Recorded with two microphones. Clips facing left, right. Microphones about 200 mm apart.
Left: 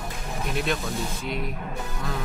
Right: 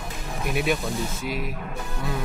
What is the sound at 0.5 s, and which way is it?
Speech, centre (ahead or behind).